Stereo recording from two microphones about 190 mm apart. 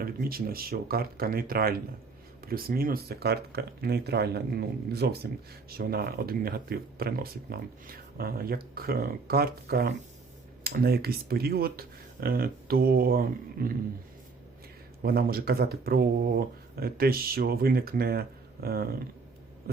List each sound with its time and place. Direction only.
0.0 s speech: 50° right (ahead or behind)
15.0 s speech: 50° right (ahead or behind)